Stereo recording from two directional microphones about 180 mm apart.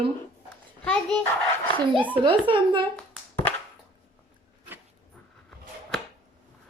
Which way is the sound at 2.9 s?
10° left (ahead or behind).